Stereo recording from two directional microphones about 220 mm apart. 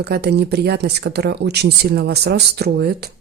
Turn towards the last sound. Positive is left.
turn(degrees=-45)  # may be behind; listen again after turning